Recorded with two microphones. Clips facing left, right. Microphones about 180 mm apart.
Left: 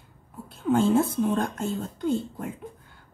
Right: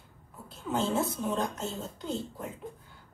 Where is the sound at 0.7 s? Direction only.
55° left (ahead or behind).